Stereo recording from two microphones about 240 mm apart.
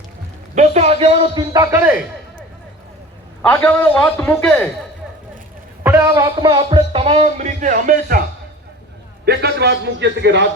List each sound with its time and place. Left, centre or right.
0.5 s a man's voice: right; by 2.0 s centre
3.4 s a man's voice: centre
5.8 s a man's voice: centre; by 8.2 s right
9.2 s a man's voice: right